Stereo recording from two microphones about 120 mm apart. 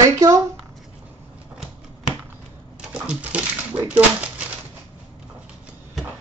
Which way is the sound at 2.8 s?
5° right (ahead or behind).